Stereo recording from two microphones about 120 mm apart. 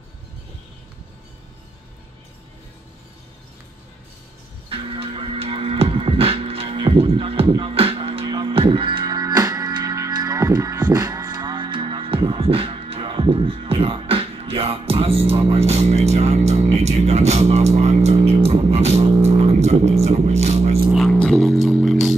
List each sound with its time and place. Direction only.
4.6 s music: 50° right (ahead or behind); by 20.8 s 65° right (ahead or behind)
20.9 s music: 5° left (ahead or behind)